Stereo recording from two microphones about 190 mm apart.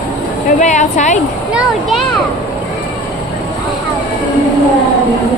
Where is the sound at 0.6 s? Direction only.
40° left (ahead or behind).